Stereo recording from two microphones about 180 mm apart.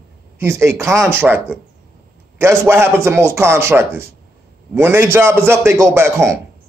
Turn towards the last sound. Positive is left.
turn(degrees=-15)  # may be behind; listen again after turning